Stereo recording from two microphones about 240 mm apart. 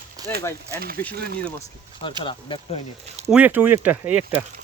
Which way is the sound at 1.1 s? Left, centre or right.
Right.